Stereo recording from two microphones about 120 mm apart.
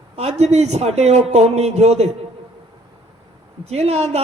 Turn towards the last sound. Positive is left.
turn(degrees=-65)  # may be behind; listen again after turning